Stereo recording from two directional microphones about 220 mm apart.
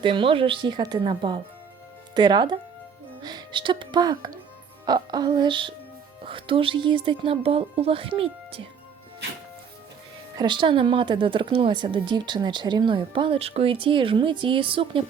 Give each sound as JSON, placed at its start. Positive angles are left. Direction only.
{"t": 0.0, "sound": "a woman's voice", "side_deg": -20}
{"t": 10.3, "sound": "a woman's voice", "side_deg": -20}